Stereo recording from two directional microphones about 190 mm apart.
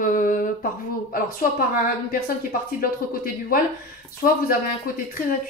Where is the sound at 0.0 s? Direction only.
45° left (ahead or behind).